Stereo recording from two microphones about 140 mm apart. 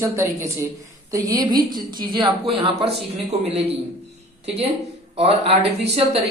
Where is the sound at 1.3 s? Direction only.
30° right (ahead or behind).